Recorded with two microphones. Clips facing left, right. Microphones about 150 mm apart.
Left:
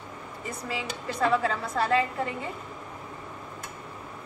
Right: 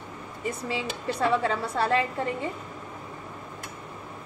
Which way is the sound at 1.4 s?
30° right (ahead or behind).